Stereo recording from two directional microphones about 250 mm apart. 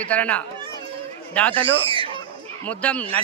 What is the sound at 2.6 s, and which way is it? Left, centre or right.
Speech, centre.